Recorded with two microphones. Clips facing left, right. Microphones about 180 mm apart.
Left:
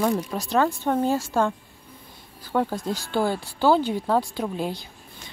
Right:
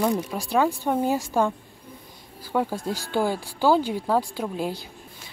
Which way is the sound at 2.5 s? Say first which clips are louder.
Left 1 dB; 10° right (ahead or behind).